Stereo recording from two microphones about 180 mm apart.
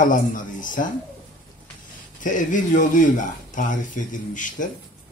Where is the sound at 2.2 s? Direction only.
45° left (ahead or behind).